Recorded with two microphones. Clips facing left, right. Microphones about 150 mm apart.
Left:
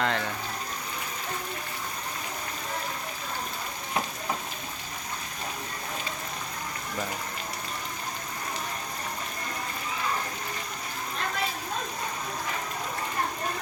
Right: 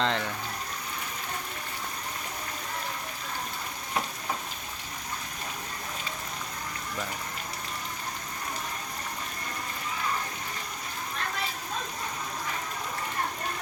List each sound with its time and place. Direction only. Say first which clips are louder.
0.0 s speech: even; 20° right (ahead or behind)